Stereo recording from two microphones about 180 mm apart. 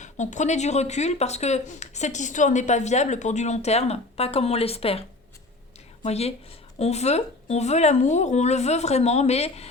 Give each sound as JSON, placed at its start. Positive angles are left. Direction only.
{"t": 0.0, "sound": "speech", "side_deg": 40}